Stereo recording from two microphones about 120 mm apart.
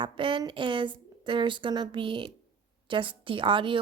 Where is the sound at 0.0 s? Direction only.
45° right (ahead or behind).